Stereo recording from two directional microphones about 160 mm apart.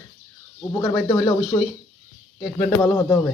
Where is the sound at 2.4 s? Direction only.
10° left (ahead or behind).